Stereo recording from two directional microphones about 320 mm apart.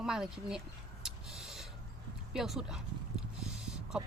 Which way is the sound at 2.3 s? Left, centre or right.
Centre.